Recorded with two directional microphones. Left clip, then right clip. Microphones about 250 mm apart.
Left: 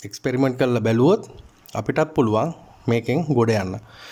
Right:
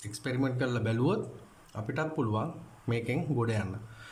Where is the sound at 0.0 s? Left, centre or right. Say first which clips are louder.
Left 11 dB; left.